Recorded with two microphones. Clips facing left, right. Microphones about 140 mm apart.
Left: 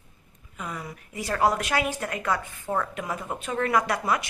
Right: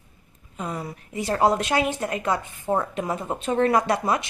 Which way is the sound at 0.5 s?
30° right (ahead or behind).